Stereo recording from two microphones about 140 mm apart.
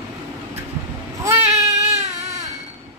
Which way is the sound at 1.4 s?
50° right (ahead or behind).